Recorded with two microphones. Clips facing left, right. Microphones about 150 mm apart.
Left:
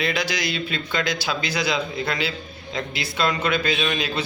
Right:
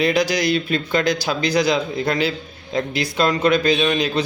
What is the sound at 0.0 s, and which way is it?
A man's voice, 45° right (ahead or behind).